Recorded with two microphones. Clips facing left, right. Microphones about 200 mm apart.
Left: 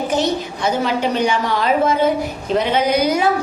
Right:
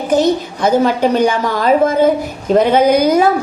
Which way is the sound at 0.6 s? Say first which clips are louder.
Right 7 dB; 45° right (ahead or behind).